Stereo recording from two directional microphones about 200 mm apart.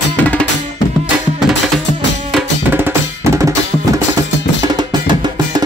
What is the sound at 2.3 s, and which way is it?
Drum, 10° right (ahead or behind).